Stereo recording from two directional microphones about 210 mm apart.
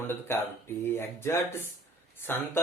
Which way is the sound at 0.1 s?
10° left (ahead or behind).